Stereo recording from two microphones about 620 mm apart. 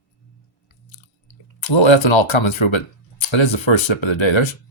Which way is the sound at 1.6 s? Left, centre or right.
Left.